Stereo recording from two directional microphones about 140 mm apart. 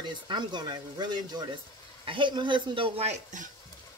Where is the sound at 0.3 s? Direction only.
30° right (ahead or behind).